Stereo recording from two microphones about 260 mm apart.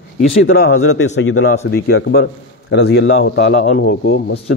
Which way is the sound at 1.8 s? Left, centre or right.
Left.